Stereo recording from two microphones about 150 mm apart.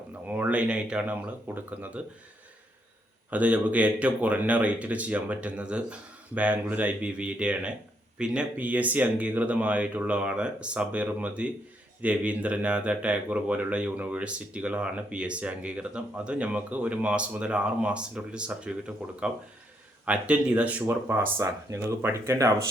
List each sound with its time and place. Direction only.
0.1 s speech: 10° right (ahead or behind)
3.2 s speech: 10° right (ahead or behind)